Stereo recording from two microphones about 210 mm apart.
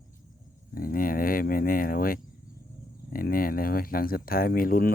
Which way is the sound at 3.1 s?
45° left (ahead or behind).